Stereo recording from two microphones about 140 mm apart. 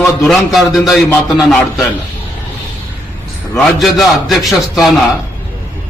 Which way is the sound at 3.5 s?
Centre (ahead or behind).